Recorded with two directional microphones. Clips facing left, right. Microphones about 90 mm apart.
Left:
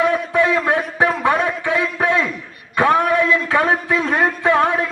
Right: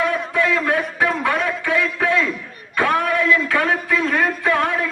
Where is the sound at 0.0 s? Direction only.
25° left (ahead or behind).